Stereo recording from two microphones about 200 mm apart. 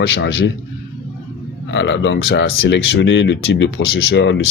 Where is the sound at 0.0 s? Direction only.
65° left (ahead or behind).